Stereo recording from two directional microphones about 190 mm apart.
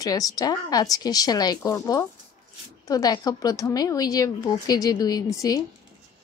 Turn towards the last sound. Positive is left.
turn(degrees=20)  # may be behind; listen again after turning